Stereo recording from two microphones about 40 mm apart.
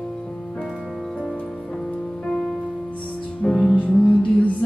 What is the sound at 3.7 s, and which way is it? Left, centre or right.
Music, left.